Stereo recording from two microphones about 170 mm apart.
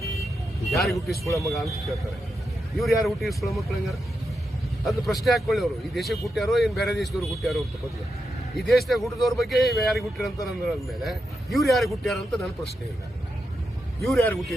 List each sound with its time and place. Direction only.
0.7 s speech: centre (ahead or behind)
5.2 s speech: centre (ahead or behind)
14.0 s speech: 5° left (ahead or behind)